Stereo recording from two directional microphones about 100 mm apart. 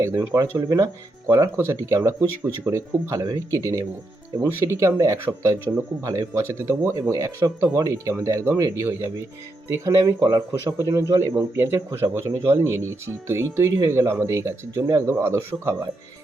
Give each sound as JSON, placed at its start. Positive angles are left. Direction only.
{"t": 0.0, "sound": "speech", "side_deg": -35}